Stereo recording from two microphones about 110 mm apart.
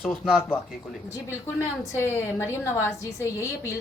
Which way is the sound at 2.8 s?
25° left (ahead or behind).